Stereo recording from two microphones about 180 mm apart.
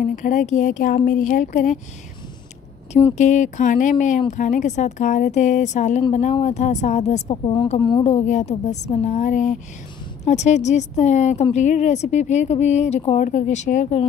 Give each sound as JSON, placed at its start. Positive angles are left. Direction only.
{"t": 0.0, "sound": "speech", "side_deg": 45}
{"t": 2.9, "sound": "speech", "side_deg": 35}